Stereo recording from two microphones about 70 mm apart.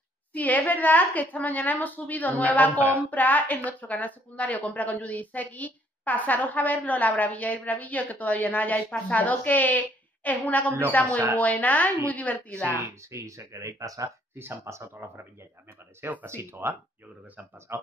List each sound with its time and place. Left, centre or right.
0.3 s speech: left
12.7 s speech: right
14.3 s speech: right
16.0 s speech: right
16.3 s speech: right